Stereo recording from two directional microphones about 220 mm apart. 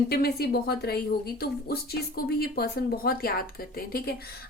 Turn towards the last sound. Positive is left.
turn(degrees=45)  # may be behind; listen again after turning